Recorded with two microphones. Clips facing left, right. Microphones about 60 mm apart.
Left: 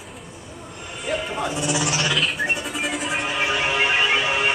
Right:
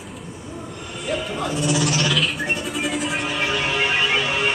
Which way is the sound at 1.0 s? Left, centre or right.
Centre.